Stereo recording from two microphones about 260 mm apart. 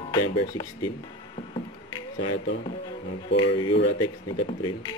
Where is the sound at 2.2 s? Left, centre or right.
Left.